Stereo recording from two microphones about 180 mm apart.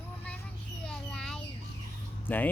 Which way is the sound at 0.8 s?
5° left (ahead or behind).